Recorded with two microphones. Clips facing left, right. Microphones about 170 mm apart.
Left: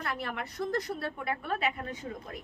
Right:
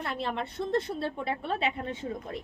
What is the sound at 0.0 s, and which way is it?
A woman's voice, 25° right (ahead or behind).